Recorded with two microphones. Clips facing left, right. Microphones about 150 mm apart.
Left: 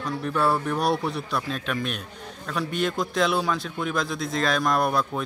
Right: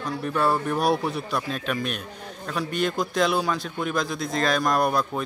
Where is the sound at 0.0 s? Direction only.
Centre (ahead or behind).